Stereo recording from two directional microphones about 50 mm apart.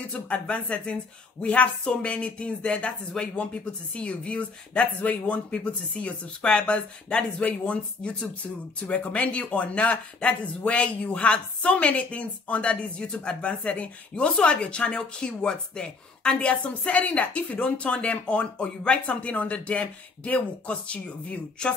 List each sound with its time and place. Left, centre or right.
0.1 s speech: left